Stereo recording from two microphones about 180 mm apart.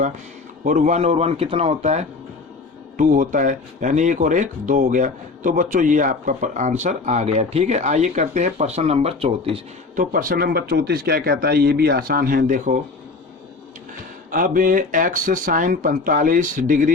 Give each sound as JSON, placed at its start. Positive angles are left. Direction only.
{"t": 0.6, "sound": "a man's voice", "side_deg": -45}
{"t": 9.9, "sound": "speech", "side_deg": -50}
{"t": 14.3, "sound": "speech", "side_deg": -50}